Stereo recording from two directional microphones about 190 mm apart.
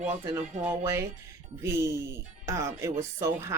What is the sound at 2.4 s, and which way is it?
Speech, 15° right (ahead or behind).